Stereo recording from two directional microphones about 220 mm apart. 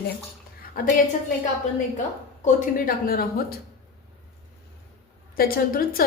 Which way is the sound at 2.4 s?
40° left (ahead or behind).